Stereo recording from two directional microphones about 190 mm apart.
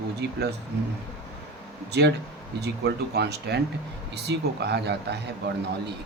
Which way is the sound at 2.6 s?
60° right (ahead or behind).